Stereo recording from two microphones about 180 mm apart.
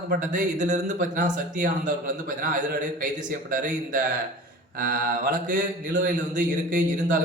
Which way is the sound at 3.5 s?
50° right (ahead or behind).